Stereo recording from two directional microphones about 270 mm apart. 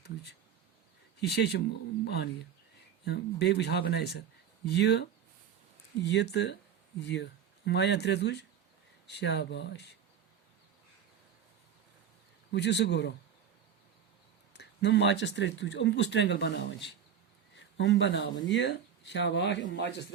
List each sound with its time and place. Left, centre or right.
0.0 s a sound: left
1.2 s speech: left
12.5 s speech: left
14.5 s speech: left